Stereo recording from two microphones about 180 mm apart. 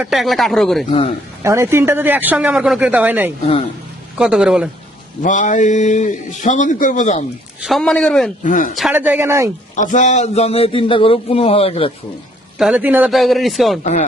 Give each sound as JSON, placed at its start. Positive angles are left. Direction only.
{"t": 0.0, "sound": "speech", "side_deg": 0}
{"t": 0.9, "sound": "a man's voice", "side_deg": 35}
{"t": 1.4, "sound": "a man's voice", "side_deg": -15}
{"t": 3.4, "sound": "a man's voice", "side_deg": 35}
{"t": 4.2, "sound": "speech", "side_deg": -5}
{"t": 5.2, "sound": "a man's voice", "side_deg": 45}
{"t": 7.6, "sound": "speech", "side_deg": 0}
{"t": 8.4, "sound": "a man's voice", "side_deg": 45}
{"t": 8.9, "sound": "a man's voice", "side_deg": -10}
{"t": 9.7, "sound": "a man's voice", "side_deg": 45}
{"t": 12.5, "sound": "speech", "side_deg": -5}